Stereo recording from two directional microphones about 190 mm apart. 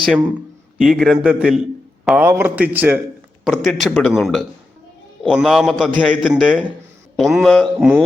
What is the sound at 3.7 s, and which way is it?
A man's voice, centre (ahead or behind).